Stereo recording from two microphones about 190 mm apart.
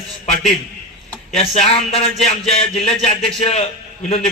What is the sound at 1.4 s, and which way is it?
A man's voice, 30° left (ahead or behind).